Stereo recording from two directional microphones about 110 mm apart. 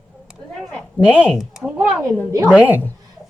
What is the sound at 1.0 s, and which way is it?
Speech, 10° right (ahead or behind).